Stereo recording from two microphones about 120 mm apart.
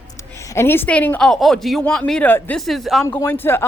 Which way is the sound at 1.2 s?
Centre (ahead or behind).